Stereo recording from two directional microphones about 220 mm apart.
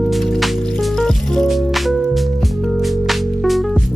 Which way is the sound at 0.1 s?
Centre (ahead or behind).